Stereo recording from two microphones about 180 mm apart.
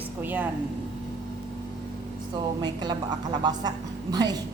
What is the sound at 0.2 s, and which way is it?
Speech, 10° right (ahead or behind).